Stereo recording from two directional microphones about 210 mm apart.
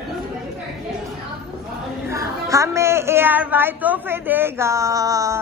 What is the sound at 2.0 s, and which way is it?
A woman's voice, 15° right (ahead or behind).